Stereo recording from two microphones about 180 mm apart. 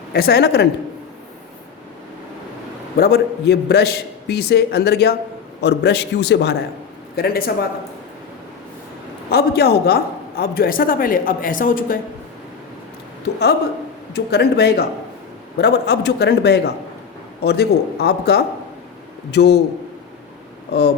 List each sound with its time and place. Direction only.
0.1 s a man's voice: 60° left (ahead or behind)
3.0 s a man's voice: 65° left (ahead or behind)
7.2 s a man's voice: 55° left (ahead or behind)
9.3 s speech: 60° left (ahead or behind)
14.1 s a man's voice: 65° left (ahead or behind)
20.7 s speech: 65° left (ahead or behind)